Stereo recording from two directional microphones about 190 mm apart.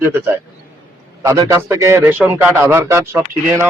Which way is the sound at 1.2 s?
15° right (ahead or behind).